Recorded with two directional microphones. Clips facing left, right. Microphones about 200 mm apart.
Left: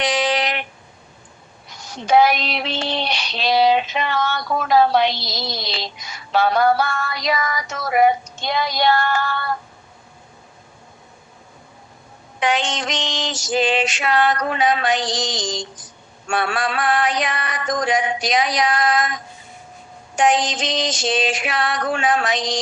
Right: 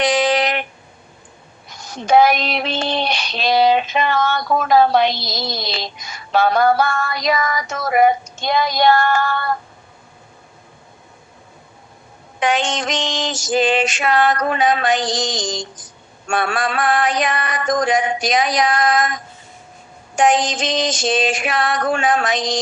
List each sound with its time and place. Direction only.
0.0 s a sound: 50° right (ahead or behind)
1.8 s child singing: 50° right (ahead or behind)
12.4 s child singing: 50° right (ahead or behind)